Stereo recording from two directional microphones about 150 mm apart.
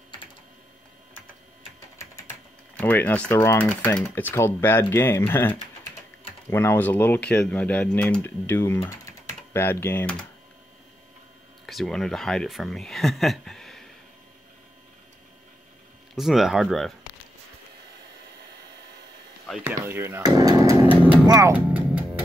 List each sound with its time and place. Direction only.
2.7 s speech: 10° left (ahead or behind)
11.6 s speech: centre (ahead or behind)
16.2 s speech: centre (ahead or behind)
19.6 s speech: 15° right (ahead or behind)
21.7 s music: 10° right (ahead or behind)